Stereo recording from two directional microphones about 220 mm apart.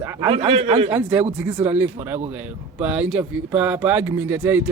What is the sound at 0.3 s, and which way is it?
Speech, 25° right (ahead or behind).